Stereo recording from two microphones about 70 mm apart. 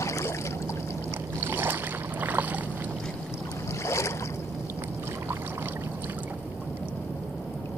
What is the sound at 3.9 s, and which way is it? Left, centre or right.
Boat, left.